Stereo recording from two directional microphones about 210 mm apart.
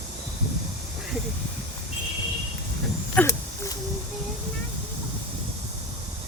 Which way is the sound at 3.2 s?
5° left (ahead or behind).